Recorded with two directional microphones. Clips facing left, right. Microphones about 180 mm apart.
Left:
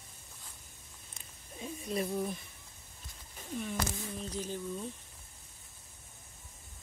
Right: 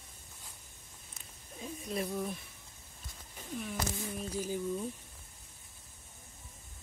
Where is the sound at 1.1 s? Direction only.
Centre (ahead or behind).